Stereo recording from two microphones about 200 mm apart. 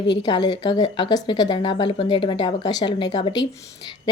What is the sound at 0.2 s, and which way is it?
A woman's voice, 20° left (ahead or behind).